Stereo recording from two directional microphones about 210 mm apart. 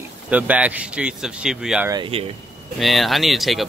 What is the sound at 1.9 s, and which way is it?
Speech, 25° right (ahead or behind).